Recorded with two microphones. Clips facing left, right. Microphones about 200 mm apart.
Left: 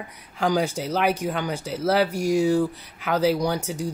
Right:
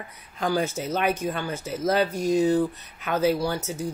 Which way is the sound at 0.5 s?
15° left (ahead or behind).